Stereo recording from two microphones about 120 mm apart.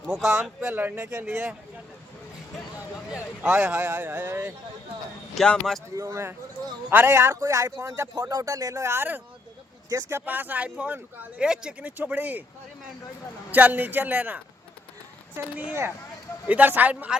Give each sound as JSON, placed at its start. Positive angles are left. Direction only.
{"t": 0.1, "sound": "speech", "side_deg": -5}
{"t": 3.1, "sound": "speech", "side_deg": -5}
{"t": 5.3, "sound": "speech", "side_deg": 5}
{"t": 6.0, "sound": "speech", "side_deg": -25}
{"t": 13.5, "sound": "speech", "side_deg": -15}